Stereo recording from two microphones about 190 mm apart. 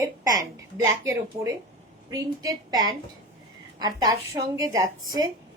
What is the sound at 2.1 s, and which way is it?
A woman's voice, 20° right (ahead or behind).